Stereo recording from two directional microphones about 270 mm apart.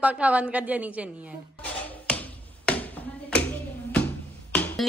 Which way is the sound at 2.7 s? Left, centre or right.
Centre.